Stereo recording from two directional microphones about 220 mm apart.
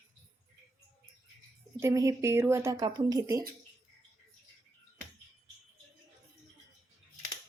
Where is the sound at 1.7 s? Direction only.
15° right (ahead or behind).